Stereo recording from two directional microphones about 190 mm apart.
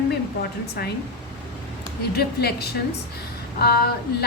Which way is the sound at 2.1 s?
55° left (ahead or behind).